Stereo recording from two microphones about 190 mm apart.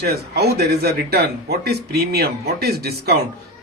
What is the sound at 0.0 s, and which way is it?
Speech, 55° right (ahead or behind).